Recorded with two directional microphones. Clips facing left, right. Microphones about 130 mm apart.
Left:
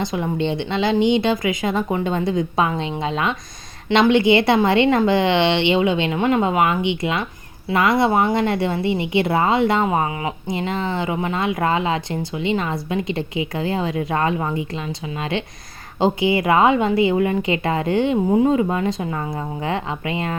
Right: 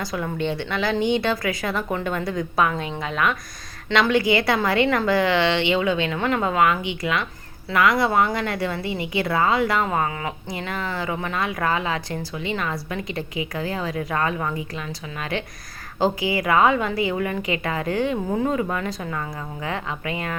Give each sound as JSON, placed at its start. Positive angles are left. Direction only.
{"t": 0.0, "sound": "speech", "side_deg": 25}